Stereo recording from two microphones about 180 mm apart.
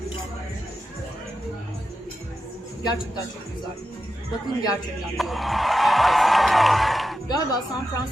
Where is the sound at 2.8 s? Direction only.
20° left (ahead or behind).